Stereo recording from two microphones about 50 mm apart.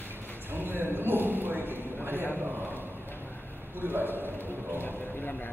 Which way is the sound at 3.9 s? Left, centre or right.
Right.